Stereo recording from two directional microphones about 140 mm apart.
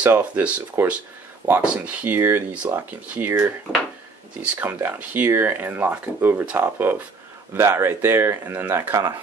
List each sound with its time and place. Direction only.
0.0 s speech: 10° right (ahead or behind)
4.6 s speech: 15° right (ahead or behind)